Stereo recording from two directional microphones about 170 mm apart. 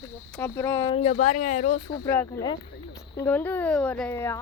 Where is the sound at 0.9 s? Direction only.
35° left (ahead or behind).